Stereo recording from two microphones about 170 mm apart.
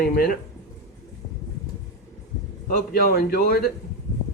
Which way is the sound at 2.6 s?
60° left (ahead or behind).